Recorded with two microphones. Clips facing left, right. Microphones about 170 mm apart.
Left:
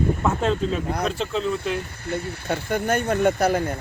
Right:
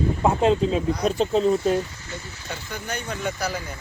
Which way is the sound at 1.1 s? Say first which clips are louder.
Right 5 dB; 40° right (ahead or behind).